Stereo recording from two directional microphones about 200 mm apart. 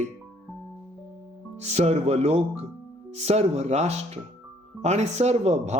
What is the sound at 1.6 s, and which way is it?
A man's voice, 35° right (ahead or behind).